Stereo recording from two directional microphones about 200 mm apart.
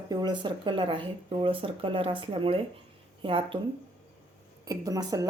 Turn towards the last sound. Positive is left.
turn(degrees=-20)  # may be behind; listen again after turning